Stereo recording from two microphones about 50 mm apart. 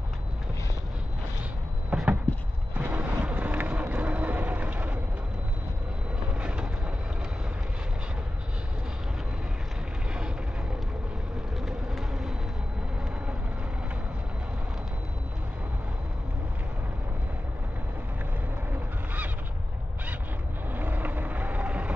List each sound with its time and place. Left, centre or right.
1.9 s a sound: right
2.8 s a sound: right
3.3 s vehicle: right
6.3 s train: right
11.5 s vehicle: centre
18.7 s goose: right
20.7 s vehicle: right